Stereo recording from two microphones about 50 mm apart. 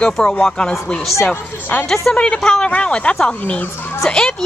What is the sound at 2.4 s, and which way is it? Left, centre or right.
Speech, centre.